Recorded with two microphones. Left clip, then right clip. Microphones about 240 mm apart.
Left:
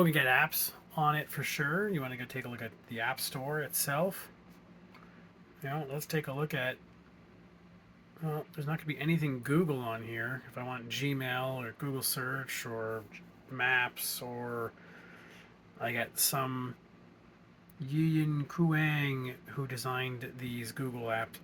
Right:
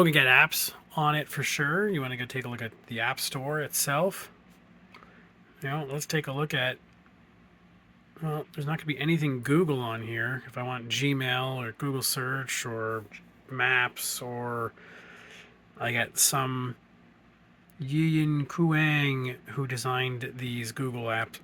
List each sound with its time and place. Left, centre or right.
0.0 s speech: right
5.5 s speech: right
8.2 s speech: right
17.7 s speech: right